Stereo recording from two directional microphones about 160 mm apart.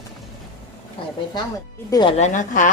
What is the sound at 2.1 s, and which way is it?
Speech, 50° left (ahead or behind).